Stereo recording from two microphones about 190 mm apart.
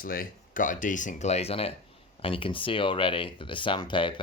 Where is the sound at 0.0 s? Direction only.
50° left (ahead or behind).